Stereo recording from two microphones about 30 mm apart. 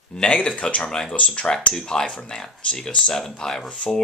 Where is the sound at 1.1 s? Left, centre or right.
Left.